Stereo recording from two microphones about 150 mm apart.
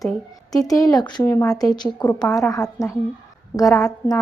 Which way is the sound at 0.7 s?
25° left (ahead or behind).